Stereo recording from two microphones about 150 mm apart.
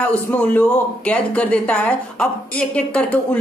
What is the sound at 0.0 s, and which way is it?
A woman's voice, 10° left (ahead or behind).